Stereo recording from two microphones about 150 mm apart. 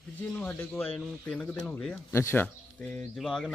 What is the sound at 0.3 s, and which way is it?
Speech, 10° left (ahead or behind).